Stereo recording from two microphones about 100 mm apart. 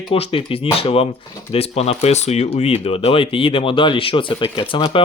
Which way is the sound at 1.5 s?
85° left.